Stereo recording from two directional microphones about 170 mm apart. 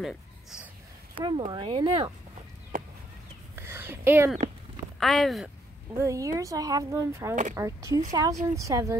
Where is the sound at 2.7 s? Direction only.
55° right (ahead or behind).